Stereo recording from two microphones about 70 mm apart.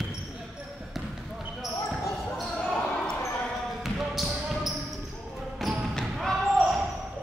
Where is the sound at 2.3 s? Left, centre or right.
Centre.